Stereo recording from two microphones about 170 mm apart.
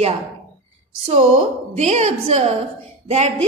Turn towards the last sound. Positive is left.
turn(degrees=-40)  # may be behind; listen again after turning